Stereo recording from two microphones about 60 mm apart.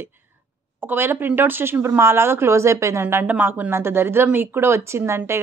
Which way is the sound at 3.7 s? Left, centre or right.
Right.